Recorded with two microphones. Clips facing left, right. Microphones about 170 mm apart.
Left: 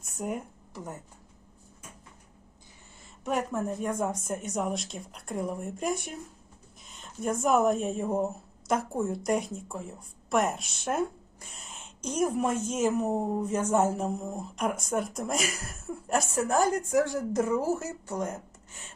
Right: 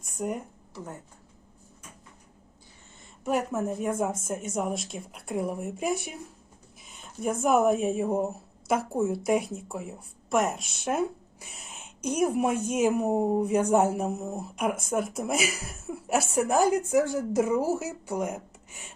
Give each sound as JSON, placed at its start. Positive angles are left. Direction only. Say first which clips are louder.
{"t": 0.0, "sound": "a sound", "louder": "right 2 dB", "side_deg": 0}
{"t": 3.2, "sound": "a woman's voice", "louder": "right 2 dB", "side_deg": -5}
{"t": 7.2, "sound": "a woman's voice", "louder": "right 1 dB", "side_deg": -5}